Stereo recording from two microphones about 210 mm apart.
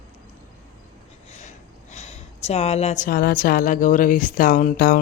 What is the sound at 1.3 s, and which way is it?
Speech, 35° left (ahead or behind).